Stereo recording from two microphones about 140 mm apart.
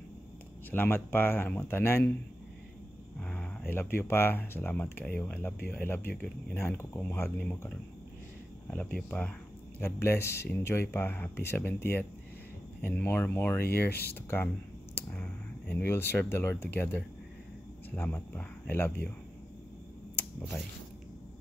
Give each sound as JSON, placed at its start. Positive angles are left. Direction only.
{"t": 0.7, "sound": "speech", "side_deg": 15}
{"t": 3.2, "sound": "speech", "side_deg": 10}
{"t": 15.0, "sound": "speech", "side_deg": 10}